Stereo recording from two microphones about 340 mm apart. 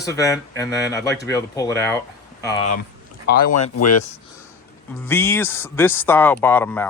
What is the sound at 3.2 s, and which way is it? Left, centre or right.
Speech, left.